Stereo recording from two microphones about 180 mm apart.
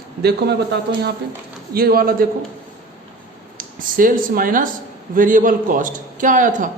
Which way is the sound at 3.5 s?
50° right (ahead or behind).